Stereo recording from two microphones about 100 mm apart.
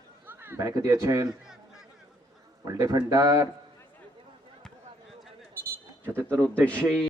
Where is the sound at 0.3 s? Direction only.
25° right (ahead or behind).